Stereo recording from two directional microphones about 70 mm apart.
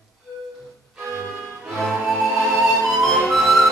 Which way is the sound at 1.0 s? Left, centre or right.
Right.